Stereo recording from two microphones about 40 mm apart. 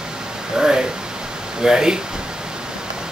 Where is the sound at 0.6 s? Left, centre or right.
Centre.